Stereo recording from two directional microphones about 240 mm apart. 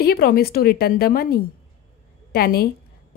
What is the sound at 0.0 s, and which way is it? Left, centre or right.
A woman's voice, left.